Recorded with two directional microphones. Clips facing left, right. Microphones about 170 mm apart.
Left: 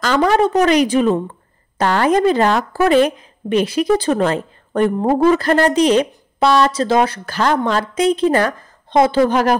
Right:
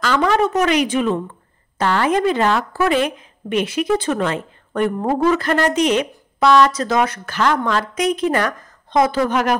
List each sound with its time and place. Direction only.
0.0 s speech: 35° left (ahead or behind)